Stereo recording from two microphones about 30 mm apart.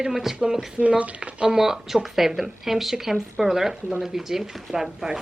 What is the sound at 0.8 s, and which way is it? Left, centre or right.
Speech, right.